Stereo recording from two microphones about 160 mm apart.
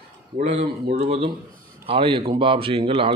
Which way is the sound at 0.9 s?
40° right (ahead or behind).